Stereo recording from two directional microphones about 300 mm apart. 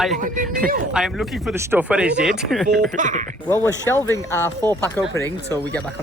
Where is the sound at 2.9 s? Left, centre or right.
Right.